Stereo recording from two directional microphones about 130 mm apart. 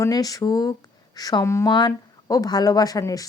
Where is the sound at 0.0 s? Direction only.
30° left (ahead or behind).